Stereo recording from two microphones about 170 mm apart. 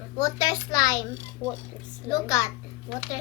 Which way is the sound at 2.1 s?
20° left (ahead or behind).